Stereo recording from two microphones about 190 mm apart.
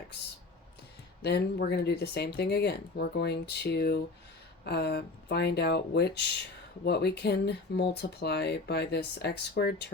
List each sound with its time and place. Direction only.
1.2 s speech: 60° left (ahead or behind)